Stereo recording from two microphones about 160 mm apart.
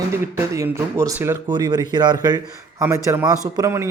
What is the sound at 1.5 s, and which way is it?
A man's voice, 25° right (ahead or behind).